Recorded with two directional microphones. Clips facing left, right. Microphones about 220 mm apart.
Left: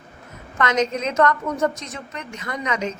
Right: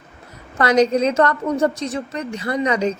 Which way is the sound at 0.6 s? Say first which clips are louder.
Right 6 dB; 35° right (ahead or behind).